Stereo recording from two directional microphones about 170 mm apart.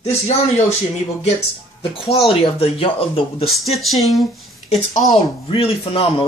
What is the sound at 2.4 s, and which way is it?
Speech, 35° left (ahead or behind).